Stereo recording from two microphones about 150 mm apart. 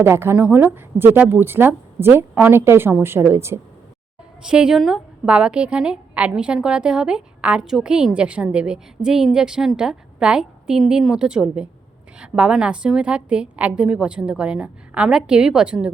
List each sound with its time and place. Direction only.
0.0 s a woman's voice: 15° right (ahead or behind)
4.4 s a woman's voice: 5° right (ahead or behind)